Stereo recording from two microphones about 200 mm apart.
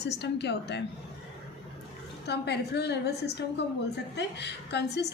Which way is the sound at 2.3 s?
55° left (ahead or behind).